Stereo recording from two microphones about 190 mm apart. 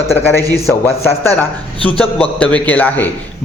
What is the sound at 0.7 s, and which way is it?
A man's voice, 10° left (ahead or behind).